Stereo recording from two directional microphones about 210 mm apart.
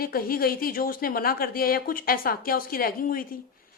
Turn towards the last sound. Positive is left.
turn(degrees=45)  # may be behind; listen again after turning